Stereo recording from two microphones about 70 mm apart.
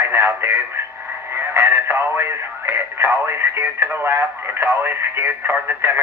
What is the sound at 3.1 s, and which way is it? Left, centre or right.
Speech, right.